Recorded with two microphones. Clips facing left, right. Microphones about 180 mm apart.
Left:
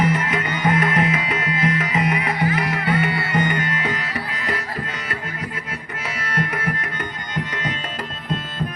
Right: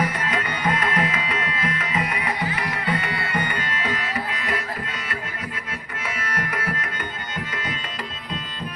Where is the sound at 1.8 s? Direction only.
25° left (ahead or behind).